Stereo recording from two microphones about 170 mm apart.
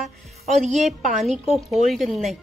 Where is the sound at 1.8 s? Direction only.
Centre (ahead or behind).